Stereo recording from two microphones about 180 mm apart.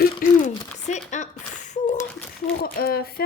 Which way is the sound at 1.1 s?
40° left (ahead or behind).